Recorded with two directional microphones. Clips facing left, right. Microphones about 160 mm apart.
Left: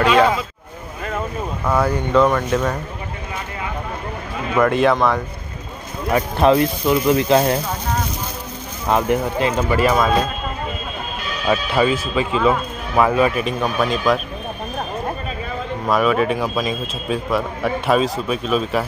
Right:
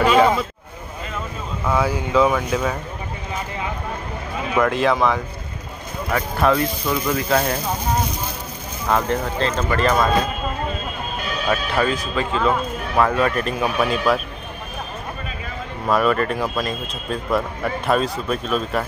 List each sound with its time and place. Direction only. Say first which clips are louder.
1.7 s a man's voice: left 2 dB; centre (ahead or behind)
4.6 s a man's voice: left 3 dB; centre (ahead or behind)
6.1 s speech: left 4 dB; 20° left (ahead or behind)
8.8 s speech: left 3 dB; 15° left (ahead or behind)
11.4 s speech: left 4 dB; 10° left (ahead or behind)
13.6 s a man's voice: left 1 dB; 5° right (ahead or behind)
15.9 s a man's voice: left 1 dB; centre (ahead or behind)